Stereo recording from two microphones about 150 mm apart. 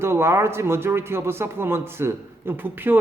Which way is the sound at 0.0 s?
15° right (ahead or behind).